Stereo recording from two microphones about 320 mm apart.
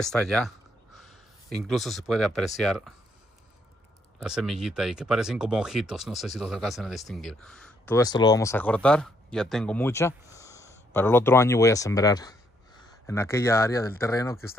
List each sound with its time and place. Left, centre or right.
0.0 s speech: centre
4.2 s speech: centre